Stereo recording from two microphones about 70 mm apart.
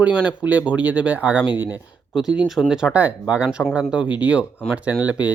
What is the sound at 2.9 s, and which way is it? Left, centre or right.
Speech, right.